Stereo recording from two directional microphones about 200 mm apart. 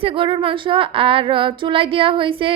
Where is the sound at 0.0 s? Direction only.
25° right (ahead or behind).